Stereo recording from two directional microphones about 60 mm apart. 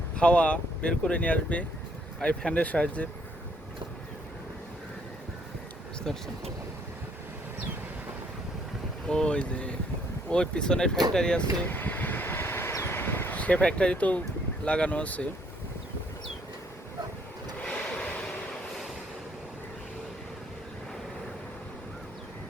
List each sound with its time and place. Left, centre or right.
0.2 s speech: left
6.1 s speech: centre
9.0 s speech: centre
11.7 s vehicle: left
12.8 s a sound: left
13.3 s speech: left
17.6 s vehicle: centre